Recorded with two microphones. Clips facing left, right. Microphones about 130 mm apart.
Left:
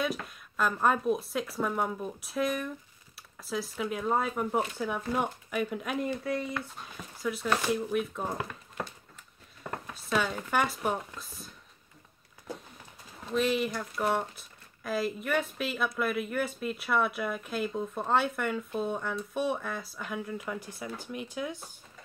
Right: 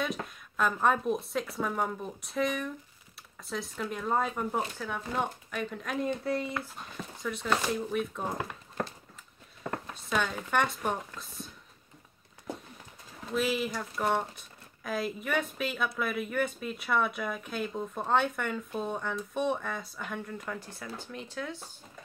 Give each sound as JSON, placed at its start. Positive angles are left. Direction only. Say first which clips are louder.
{"t": 0.0, "sound": "speech", "louder": "left 1 dB", "side_deg": 0}
{"t": 6.0, "sound": "speech", "louder": "right 4 dB", "side_deg": -25}
{"t": 7.2, "sound": "speech", "louder": "left 1 dB", "side_deg": 5}
{"t": 13.3, "sound": "speech", "louder": "left 2 dB", "side_deg": 0}